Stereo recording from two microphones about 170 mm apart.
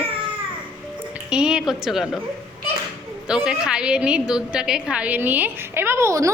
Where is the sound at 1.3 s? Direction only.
5° right (ahead or behind).